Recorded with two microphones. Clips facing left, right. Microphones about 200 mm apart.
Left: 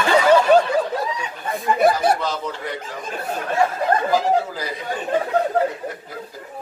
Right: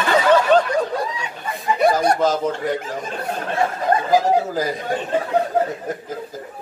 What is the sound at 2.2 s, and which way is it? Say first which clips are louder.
Speech: right 7 dB; 45° right (ahead or behind).